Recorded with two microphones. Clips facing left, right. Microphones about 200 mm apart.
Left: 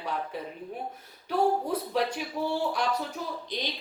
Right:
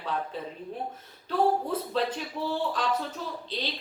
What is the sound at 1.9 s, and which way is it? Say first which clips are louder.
Speech: even; 10° left (ahead or behind).